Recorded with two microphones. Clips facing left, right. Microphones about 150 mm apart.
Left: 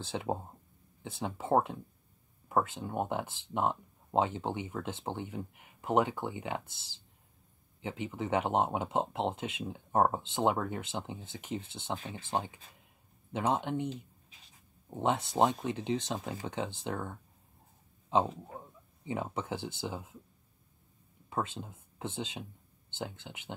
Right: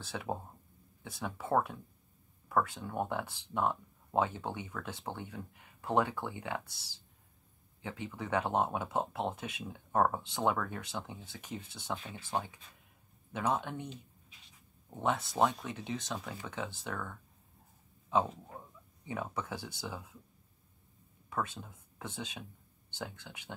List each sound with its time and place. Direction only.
0.0 s speech: 25° left (ahead or behind)
14.9 s speech: 25° left (ahead or behind)
19.0 s speech: 25° left (ahead or behind)
21.3 s speech: 25° left (ahead or behind)